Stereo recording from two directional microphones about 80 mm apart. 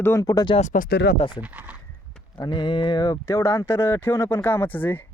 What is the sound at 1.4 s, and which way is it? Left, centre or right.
Speech, centre.